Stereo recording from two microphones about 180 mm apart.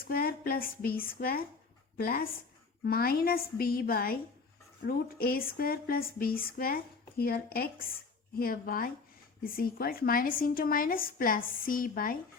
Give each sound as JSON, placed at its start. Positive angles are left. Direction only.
{"t": 0.1, "sound": "a woman's voice", "side_deg": 55}